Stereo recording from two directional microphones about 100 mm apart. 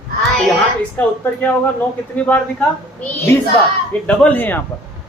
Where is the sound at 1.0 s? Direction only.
20° left (ahead or behind).